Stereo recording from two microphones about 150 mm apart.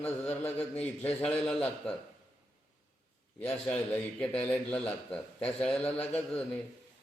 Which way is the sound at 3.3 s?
10° left (ahead or behind).